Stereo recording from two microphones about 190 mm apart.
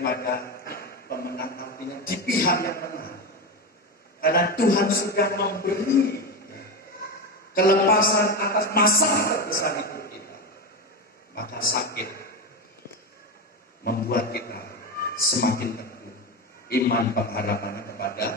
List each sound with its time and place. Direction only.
0.0 s a sound: 55° left (ahead or behind)
4.2 s a man's voice: 55° left (ahead or behind)
7.5 s a man's voice: 55° left (ahead or behind)
11.3 s a man's voice: 55° left (ahead or behind)
13.8 s a man's voice: 55° left (ahead or behind)